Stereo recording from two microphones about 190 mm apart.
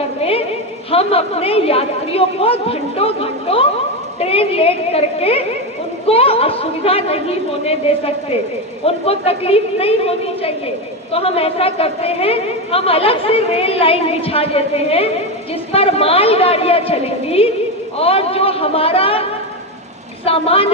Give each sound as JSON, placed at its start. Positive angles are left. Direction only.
{"t": 0.2, "sound": "a sound", "side_deg": 30}
{"t": 0.9, "sound": "a woman's voice", "side_deg": 30}
{"t": 20.2, "sound": "a woman's voice", "side_deg": 30}